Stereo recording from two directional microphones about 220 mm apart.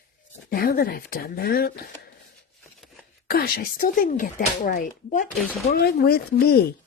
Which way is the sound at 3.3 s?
45° left (ahead or behind).